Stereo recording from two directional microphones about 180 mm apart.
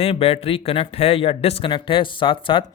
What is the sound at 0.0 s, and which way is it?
Speech, 35° left (ahead or behind).